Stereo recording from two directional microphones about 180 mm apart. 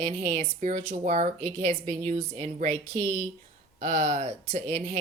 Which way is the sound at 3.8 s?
40° right (ahead or behind).